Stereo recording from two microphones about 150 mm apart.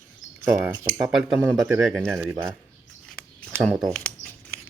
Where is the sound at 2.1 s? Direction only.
15° right (ahead or behind).